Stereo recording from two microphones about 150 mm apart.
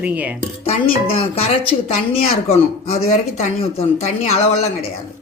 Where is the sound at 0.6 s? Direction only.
40° left (ahead or behind).